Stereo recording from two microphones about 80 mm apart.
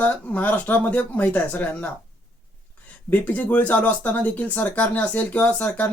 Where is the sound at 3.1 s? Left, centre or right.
Centre.